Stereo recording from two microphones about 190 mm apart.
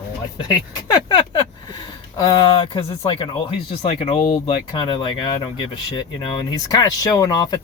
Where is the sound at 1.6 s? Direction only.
20° left (ahead or behind).